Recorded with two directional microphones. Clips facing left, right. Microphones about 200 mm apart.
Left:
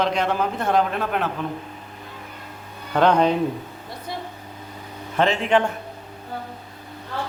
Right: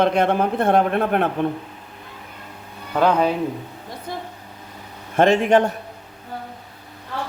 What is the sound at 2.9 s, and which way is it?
Speech, 10° right (ahead or behind).